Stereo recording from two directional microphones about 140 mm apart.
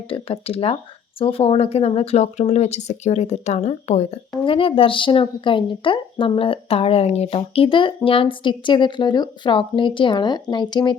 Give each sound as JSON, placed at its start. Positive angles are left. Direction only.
{"t": 0.1, "sound": "speech", "side_deg": 45}
{"t": 4.4, "sound": "speech", "side_deg": 40}